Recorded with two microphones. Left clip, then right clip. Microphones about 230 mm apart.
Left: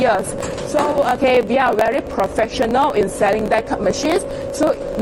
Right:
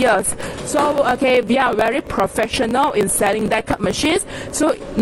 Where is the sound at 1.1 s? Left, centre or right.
Right.